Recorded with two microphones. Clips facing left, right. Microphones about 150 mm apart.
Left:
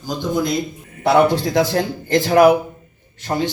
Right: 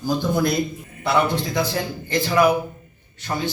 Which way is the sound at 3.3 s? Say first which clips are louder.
Left 5 dB; 40° left (ahead or behind).